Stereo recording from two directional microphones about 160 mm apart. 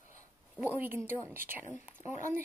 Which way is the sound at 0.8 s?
15° right (ahead or behind).